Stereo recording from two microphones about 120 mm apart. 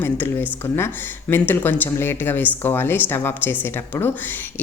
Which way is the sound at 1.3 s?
15° left (ahead or behind).